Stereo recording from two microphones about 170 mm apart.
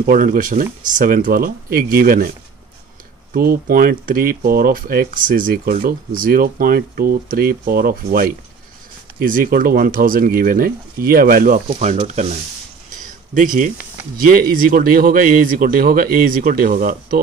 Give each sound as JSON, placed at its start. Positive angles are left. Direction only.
{"t": 0.0, "sound": "speech", "side_deg": -55}
{"t": 3.3, "sound": "speech", "side_deg": -60}
{"t": 13.3, "sound": "speech", "side_deg": -50}